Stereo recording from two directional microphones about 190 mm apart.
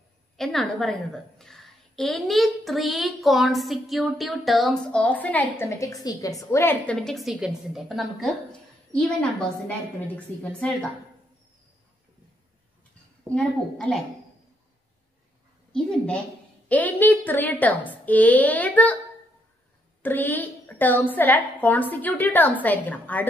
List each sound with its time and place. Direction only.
0.4 s a woman's voice: centre (ahead or behind)
10.1 s a woman's voice: 5° left (ahead or behind)
13.3 s a woman's voice: 5° left (ahead or behind)
15.7 s a woman's voice: 5° left (ahead or behind)
20.0 s a woman's voice: 10° left (ahead or behind)